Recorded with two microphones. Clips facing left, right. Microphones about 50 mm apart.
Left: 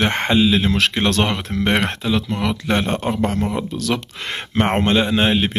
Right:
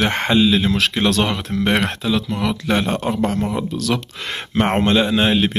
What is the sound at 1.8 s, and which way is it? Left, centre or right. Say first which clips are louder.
Speech: even; left.